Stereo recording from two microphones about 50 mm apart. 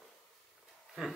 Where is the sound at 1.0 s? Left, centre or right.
Centre.